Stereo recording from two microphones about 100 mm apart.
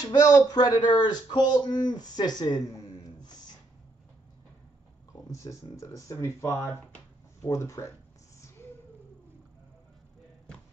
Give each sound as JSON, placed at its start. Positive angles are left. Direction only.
{"t": 0.0, "sound": "speech", "side_deg": 40}
{"t": 5.1, "sound": "speech", "side_deg": 35}